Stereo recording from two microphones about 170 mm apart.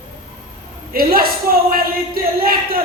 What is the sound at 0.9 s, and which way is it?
A man's voice, 60° right (ahead or behind).